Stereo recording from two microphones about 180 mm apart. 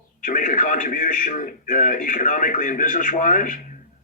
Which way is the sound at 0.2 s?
45° left (ahead or behind).